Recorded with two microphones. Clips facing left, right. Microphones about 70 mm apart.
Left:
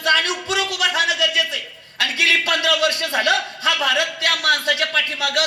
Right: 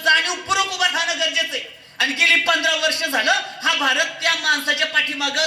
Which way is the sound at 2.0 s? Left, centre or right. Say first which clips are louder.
Right 1 dB; right.